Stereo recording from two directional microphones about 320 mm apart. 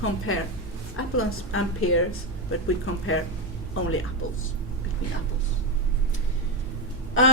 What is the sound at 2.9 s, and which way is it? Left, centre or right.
Speech, left.